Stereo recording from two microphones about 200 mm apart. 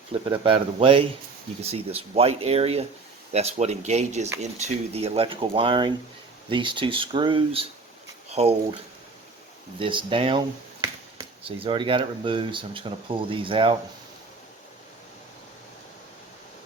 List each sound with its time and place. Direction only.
0.1 s speech: 25° right (ahead or behind)
9.7 s speech: 25° right (ahead or behind)